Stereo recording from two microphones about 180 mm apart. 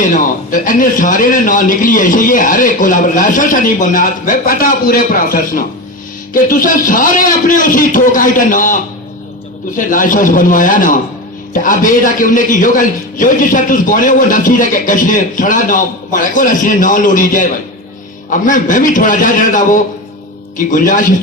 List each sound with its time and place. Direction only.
0.0 s a man's voice: 45° left (ahead or behind)